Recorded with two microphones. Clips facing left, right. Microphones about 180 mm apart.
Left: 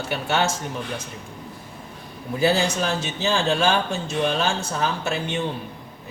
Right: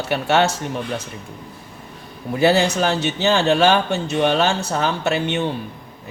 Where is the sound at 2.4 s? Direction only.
70° right (ahead or behind).